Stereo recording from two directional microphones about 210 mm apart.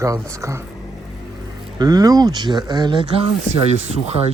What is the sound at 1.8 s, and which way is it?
A man's voice, 20° right (ahead or behind).